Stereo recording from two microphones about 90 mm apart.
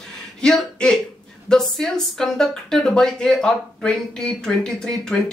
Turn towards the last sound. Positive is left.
turn(degrees=5)  # may be behind; listen again after turning